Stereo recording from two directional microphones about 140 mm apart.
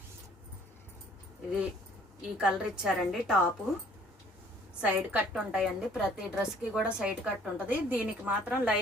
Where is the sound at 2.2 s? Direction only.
5° right (ahead or behind).